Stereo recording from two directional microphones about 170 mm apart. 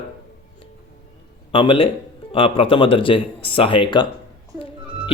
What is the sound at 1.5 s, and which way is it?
Speech, 30° left (ahead or behind).